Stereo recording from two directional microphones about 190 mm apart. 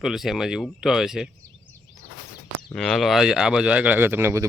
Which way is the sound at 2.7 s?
Centre (ahead or behind).